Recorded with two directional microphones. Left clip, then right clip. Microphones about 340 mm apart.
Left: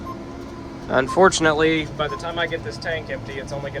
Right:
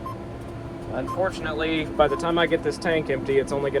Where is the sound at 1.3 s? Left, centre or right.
Centre.